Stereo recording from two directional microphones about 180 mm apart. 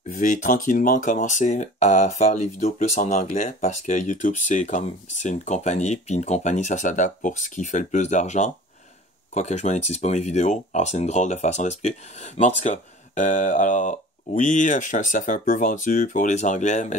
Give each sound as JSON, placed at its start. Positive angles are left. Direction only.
{"t": 0.2, "sound": "speech", "side_deg": 45}